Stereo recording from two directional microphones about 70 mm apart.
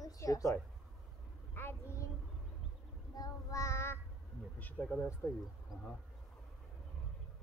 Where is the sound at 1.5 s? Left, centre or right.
Left.